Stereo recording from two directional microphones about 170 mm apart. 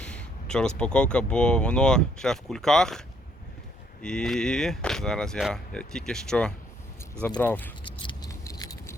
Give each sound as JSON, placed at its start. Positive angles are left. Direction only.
{"t": 0.0, "sound": "speech", "side_deg": 5}
{"t": 4.0, "sound": "speech", "side_deg": 5}
{"t": 7.9, "sound": "a sound", "side_deg": 25}